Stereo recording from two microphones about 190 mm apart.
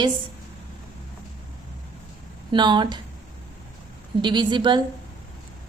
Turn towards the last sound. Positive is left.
turn(degrees=-25)  # may be behind; listen again after turning